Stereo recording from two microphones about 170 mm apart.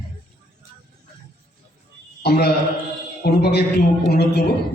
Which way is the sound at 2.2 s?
70° left (ahead or behind).